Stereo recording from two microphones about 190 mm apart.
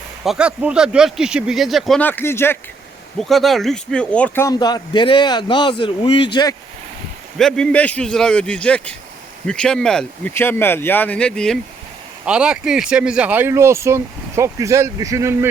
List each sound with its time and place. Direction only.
0.3 s speech: 5° right (ahead or behind); by 2.6 s 10° left (ahead or behind)
3.2 s speech: centre (ahead or behind)
4.4 s speech: 20° left (ahead or behind)
7.3 s speech: 5° left (ahead or behind); by 15.4 s 15° right (ahead or behind)